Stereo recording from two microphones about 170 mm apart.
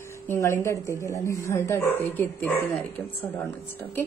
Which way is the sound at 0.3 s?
15° left (ahead or behind).